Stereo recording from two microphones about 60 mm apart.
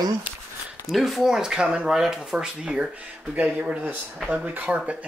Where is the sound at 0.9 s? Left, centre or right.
Centre.